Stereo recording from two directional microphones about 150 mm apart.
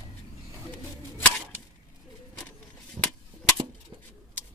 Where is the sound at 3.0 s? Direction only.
30° right (ahead or behind).